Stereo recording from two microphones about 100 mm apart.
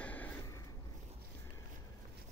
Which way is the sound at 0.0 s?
15° left (ahead or behind).